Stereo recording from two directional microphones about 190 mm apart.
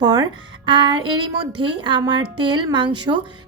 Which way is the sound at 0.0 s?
20° right (ahead or behind).